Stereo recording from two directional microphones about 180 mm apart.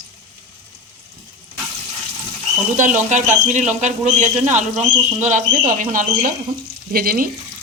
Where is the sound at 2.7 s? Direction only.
45° right (ahead or behind).